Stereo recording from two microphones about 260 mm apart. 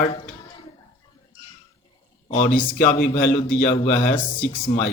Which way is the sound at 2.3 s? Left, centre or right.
Left.